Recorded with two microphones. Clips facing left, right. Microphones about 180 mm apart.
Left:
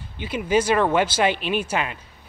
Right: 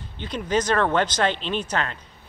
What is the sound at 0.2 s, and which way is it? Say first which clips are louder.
Speech: left 3 dB; 10° left (ahead or behind).